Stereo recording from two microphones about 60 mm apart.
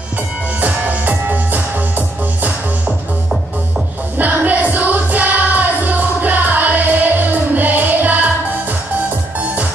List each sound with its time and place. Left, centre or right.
0.6 s music: right
4.2 s music: right